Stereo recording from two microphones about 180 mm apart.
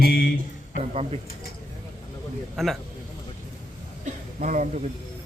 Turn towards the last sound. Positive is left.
turn(degrees=-45)  # may be behind; listen again after turning